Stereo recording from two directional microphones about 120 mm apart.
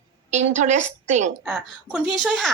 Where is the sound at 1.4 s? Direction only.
5° left (ahead or behind).